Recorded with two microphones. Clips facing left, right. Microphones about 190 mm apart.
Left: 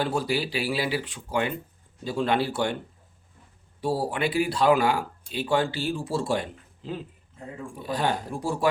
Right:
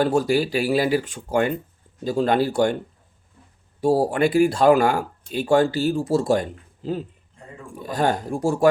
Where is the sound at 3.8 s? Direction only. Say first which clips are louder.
Right 8 dB; 45° right (ahead or behind).